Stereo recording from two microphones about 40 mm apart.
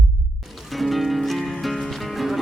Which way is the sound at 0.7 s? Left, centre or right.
Centre.